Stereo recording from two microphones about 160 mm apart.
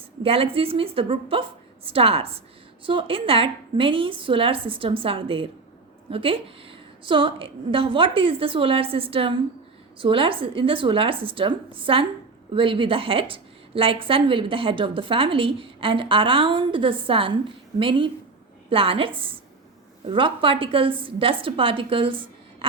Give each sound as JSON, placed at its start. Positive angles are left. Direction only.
{"t": 0.2, "sound": "a woman's voice", "side_deg": -35}